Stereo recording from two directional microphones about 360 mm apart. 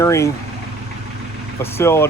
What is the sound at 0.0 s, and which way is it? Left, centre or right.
Speech, centre.